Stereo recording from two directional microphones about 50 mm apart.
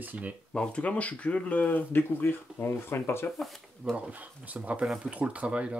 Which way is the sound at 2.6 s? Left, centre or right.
Left.